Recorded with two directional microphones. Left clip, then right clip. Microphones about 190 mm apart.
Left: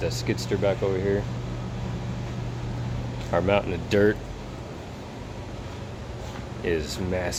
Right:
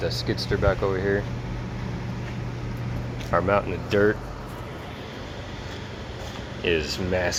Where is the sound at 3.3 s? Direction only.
25° left (ahead or behind).